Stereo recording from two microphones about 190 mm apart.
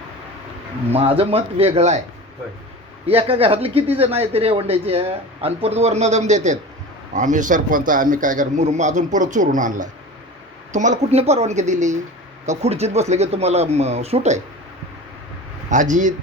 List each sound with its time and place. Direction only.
0.9 s speech: 30° right (ahead or behind)
3.1 s a man's voice: 30° right (ahead or behind)
15.7 s speech: 40° right (ahead or behind)